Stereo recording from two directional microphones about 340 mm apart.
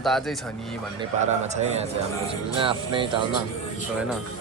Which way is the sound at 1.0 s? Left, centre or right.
Centre.